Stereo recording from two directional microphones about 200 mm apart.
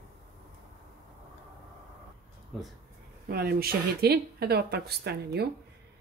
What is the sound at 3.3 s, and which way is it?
Speech, 50° right (ahead or behind).